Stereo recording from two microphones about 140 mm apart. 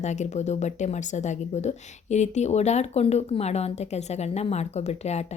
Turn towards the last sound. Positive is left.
turn(degrees=50)  # may be behind; listen again after turning